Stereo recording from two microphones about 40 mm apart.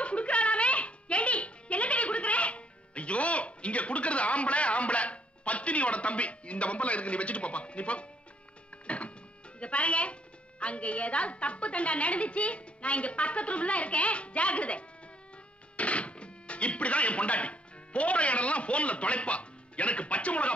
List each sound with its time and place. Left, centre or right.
0.0 s music: left
8.8 s printer: left
9.6 s a woman's voice: left